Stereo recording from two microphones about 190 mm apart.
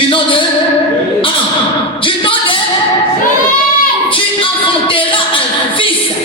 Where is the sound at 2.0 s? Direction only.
25° left (ahead or behind).